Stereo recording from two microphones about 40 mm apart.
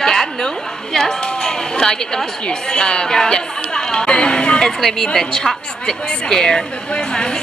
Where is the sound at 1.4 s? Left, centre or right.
Centre.